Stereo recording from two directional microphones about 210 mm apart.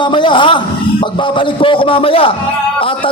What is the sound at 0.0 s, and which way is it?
A man's voice, 20° left (ahead or behind).